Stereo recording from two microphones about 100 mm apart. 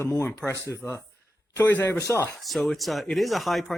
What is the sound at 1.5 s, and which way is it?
Speech, 20° left (ahead or behind).